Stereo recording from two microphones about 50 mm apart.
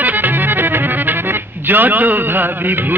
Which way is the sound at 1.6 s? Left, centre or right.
Right.